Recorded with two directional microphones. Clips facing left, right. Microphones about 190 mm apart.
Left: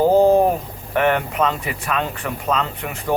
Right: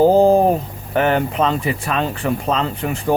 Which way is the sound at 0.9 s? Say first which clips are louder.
Right 2 dB; 35° right (ahead or behind).